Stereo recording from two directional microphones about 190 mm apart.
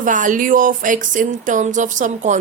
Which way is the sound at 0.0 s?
45° right (ahead or behind).